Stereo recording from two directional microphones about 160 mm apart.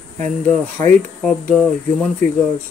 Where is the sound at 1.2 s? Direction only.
Centre (ahead or behind).